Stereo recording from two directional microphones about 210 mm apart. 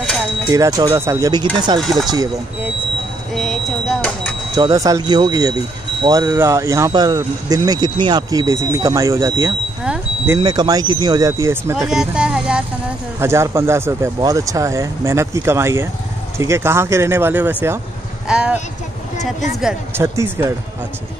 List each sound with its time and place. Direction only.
0.5 s speech: 15° right (ahead or behind)
1.8 s speech: centre (ahead or behind)
2.0 s speech: 20° right (ahead or behind)
3.3 s vehicle: centre (ahead or behind)
4.6 s speech: 15° right (ahead or behind)
11.9 s speech: 5° right (ahead or behind)
19.6 s speech: 10° right (ahead or behind)